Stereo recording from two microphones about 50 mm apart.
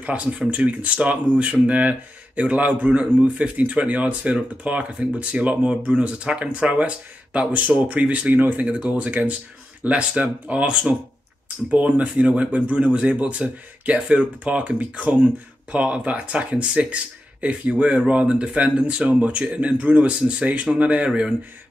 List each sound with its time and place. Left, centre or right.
0.0 s speech: right